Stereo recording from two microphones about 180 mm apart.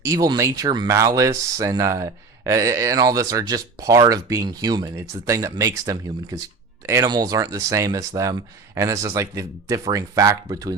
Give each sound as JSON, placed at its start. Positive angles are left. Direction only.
{"t": 0.0, "sound": "speech", "side_deg": -20}